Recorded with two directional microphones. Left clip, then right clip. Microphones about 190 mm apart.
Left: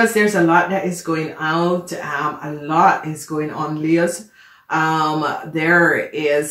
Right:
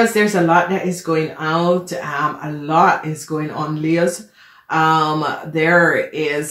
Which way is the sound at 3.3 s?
30° right (ahead or behind).